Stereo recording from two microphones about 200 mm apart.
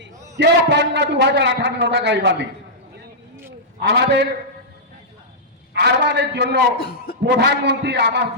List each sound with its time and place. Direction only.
0.0 s a man's voice: 55° right (ahead or behind)
3.8 s a man's voice: 55° right (ahead or behind)
5.7 s a man's voice: 55° right (ahead or behind)
6.7 s a man's voice: 50° left (ahead or behind)
7.3 s a man's voice: 55° right (ahead or behind)